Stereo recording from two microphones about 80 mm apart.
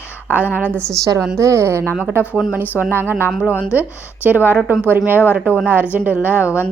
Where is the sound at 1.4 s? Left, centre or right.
Right.